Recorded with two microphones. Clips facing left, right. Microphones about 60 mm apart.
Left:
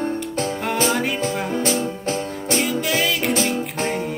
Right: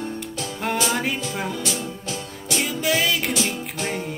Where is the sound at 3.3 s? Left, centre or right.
Left.